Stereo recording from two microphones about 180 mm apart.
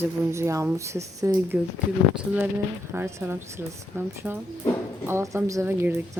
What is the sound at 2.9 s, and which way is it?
A woman's voice, 10° right (ahead or behind).